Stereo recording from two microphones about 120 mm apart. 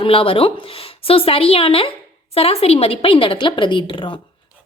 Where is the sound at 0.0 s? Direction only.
50° left (ahead or behind).